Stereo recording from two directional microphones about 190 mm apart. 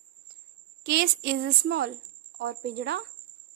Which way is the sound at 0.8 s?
60° right (ahead or behind).